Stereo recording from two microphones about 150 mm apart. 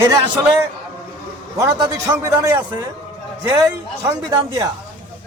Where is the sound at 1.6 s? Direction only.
25° right (ahead or behind).